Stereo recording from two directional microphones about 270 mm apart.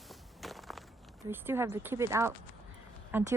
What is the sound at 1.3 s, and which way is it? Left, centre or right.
Speech, centre.